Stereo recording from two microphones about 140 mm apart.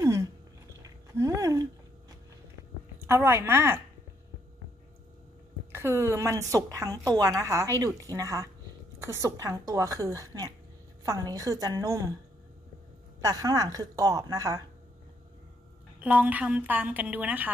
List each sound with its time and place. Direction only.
0.0 s a sound: 25° right (ahead or behind)
0.8 s chewing: 25° right (ahead or behind)
3.1 s a woman's voice: 20° right (ahead or behind)
5.7 s a woman's voice: 20° right (ahead or behind)
13.2 s a woman's voice: 25° right (ahead or behind)
16.0 s a woman's voice: 10° right (ahead or behind)